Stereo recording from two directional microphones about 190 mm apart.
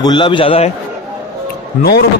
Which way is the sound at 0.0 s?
25° left (ahead or behind).